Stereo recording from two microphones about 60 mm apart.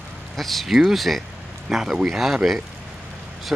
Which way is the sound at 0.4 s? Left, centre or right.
Centre.